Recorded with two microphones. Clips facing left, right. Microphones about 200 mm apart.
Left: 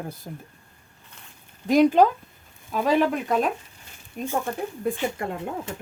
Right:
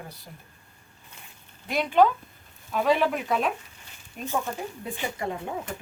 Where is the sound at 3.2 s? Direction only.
45° left (ahead or behind).